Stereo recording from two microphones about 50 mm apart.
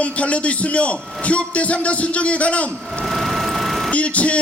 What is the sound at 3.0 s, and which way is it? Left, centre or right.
Vehicle, centre.